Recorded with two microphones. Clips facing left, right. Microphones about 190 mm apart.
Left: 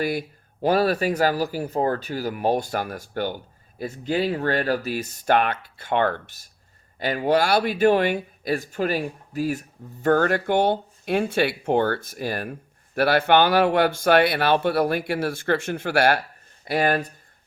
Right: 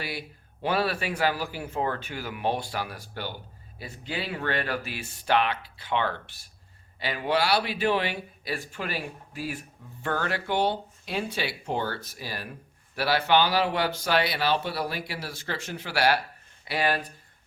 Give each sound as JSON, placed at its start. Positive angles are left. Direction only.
{"t": 0.0, "sound": "speech", "side_deg": 45}